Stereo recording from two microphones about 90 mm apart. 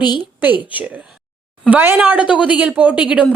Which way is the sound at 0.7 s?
15° right (ahead or behind).